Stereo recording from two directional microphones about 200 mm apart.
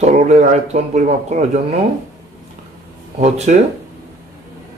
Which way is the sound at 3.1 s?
35° right (ahead or behind).